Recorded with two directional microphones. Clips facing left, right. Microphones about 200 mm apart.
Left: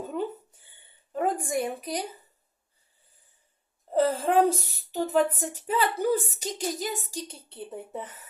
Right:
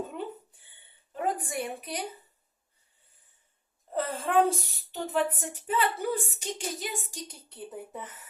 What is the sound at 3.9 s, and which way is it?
Speech, 40° left (ahead or behind).